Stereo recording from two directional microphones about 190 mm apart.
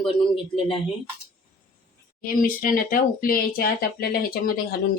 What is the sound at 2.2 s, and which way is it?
Speech, 45° left (ahead or behind).